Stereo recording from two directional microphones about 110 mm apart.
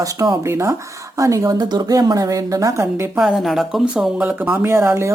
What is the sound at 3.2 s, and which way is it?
Speech, 5° right (ahead or behind).